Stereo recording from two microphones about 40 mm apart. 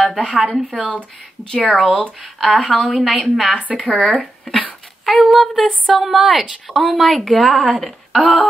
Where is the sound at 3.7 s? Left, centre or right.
Left.